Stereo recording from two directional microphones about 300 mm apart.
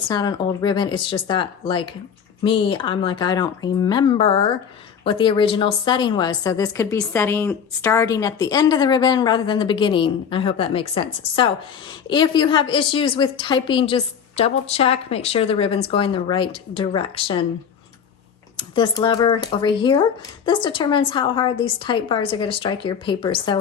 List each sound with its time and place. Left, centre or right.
0.1 s a woman's voice: centre
18.5 s a woman's voice: centre